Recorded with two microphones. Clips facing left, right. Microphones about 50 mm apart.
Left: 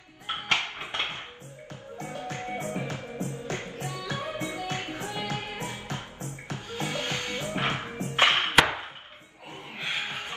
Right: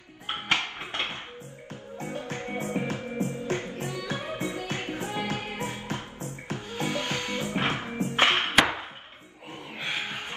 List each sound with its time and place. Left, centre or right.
0.9 s music: left
1.7 s music: right
8.2 s music: left
9.5 s a sound: right